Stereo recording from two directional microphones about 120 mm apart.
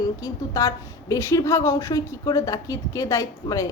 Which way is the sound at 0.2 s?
30° left (ahead or behind).